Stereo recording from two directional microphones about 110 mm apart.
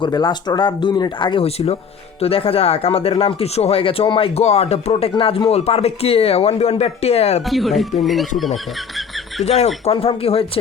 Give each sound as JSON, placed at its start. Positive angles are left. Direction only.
{"t": 0.0, "sound": "speech", "side_deg": 40}
{"t": 1.5, "sound": "speech", "side_deg": 65}
{"t": 7.4, "sound": "speech", "side_deg": 0}
{"t": 9.4, "sound": "speech", "side_deg": 80}
{"t": 9.8, "sound": "speech", "side_deg": 60}